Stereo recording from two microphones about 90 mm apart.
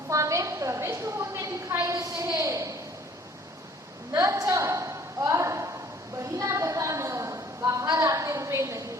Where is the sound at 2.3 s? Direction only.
35° right (ahead or behind).